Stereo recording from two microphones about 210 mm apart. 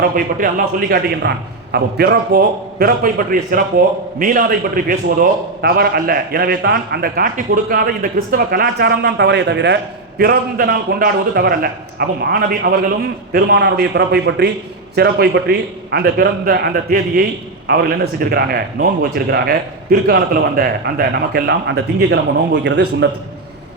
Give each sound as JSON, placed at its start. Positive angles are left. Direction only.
{"t": 0.3, "sound": "a man's voice", "side_deg": -45}